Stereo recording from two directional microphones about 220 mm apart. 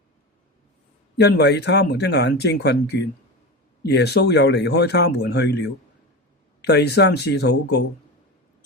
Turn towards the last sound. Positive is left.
turn(degrees=50)  # may be behind; listen again after turning